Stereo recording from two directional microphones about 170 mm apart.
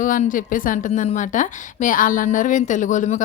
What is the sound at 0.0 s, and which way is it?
A woman's voice, 50° left (ahead or behind).